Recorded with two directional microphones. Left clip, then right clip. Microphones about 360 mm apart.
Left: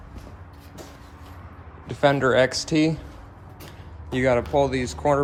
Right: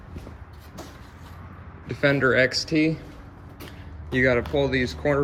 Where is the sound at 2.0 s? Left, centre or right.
Left.